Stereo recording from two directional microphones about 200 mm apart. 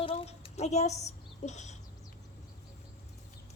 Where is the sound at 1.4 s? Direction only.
35° left (ahead or behind).